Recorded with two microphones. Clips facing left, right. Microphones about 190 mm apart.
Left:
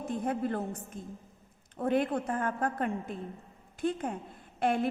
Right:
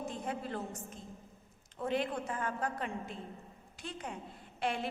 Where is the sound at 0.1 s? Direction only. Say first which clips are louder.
Left 7 dB; 55° left (ahead or behind).